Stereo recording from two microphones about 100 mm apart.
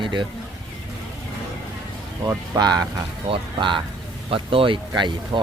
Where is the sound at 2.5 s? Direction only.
40° right (ahead or behind).